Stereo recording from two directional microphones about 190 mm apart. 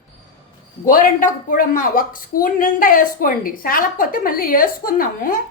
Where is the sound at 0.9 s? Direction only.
45° left (ahead or behind).